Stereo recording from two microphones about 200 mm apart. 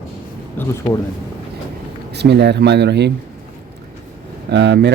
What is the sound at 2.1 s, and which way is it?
Speech, 55° right (ahead or behind).